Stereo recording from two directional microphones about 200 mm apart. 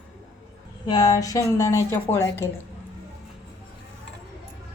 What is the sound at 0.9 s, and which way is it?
A woman's voice, 20° left (ahead or behind).